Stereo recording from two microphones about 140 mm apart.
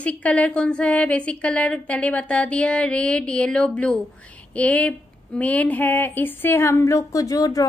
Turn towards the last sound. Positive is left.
turn(degrees=25)  # may be behind; listen again after turning